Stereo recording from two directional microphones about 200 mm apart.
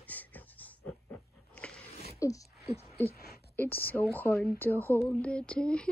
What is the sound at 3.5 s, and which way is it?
Speech, 10° left (ahead or behind).